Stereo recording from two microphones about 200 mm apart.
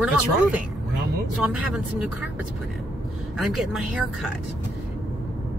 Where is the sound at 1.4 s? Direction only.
5° right (ahead or behind).